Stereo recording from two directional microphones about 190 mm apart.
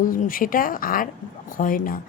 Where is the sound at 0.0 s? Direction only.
45° left (ahead or behind).